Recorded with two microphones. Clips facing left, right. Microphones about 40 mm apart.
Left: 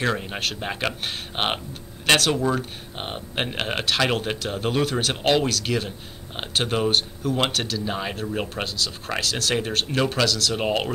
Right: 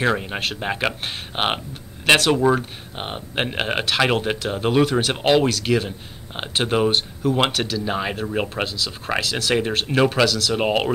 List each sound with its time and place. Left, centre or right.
0.0 s speech: centre
3.0 s speech: centre